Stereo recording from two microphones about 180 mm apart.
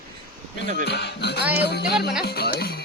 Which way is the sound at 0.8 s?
70° left (ahead or behind).